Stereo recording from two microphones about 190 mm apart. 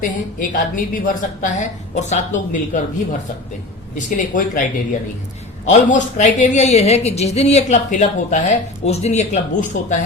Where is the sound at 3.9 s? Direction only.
45° left (ahead or behind).